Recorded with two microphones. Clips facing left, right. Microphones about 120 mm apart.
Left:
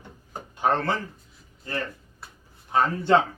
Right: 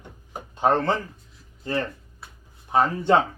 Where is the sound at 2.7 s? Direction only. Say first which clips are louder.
Right 1 dB; 20° right (ahead or behind).